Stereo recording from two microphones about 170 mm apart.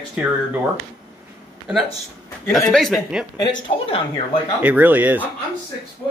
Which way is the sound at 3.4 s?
30° left (ahead or behind).